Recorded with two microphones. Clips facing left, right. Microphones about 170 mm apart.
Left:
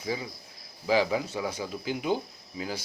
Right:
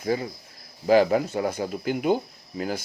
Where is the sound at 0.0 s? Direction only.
55° right (ahead or behind).